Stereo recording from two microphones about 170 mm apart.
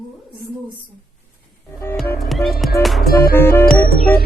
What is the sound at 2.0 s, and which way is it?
Music, centre (ahead or behind).